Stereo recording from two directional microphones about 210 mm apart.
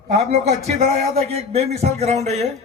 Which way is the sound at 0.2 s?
30° right (ahead or behind).